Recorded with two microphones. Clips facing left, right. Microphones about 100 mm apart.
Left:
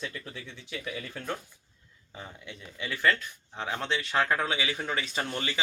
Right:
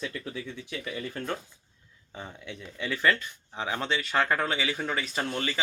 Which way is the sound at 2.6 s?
5° left (ahead or behind).